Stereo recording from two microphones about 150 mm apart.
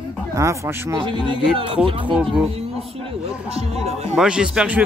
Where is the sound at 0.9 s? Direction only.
35° right (ahead or behind).